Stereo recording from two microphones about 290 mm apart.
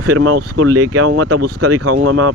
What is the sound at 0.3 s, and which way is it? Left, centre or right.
Speech, right.